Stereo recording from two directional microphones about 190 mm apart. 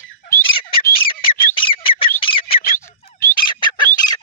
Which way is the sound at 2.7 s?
15° left (ahead or behind).